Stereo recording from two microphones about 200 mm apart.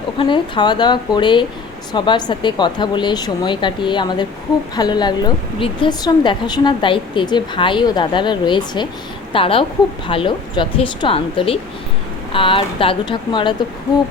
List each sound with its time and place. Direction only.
0.2 s a woman's voice: 25° left (ahead or behind)